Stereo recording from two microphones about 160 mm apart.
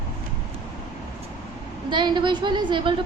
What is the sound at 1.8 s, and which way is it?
A woman's voice, 30° right (ahead or behind).